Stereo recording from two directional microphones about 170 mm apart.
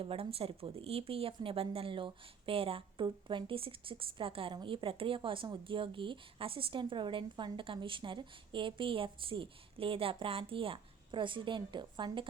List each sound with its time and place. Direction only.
0.0 s speech: 35° right (ahead or behind)